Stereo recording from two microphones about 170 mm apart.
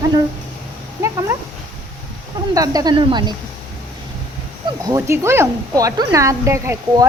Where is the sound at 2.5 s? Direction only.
20° right (ahead or behind).